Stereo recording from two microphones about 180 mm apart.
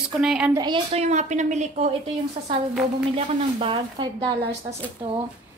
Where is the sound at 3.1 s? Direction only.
30° right (ahead or behind).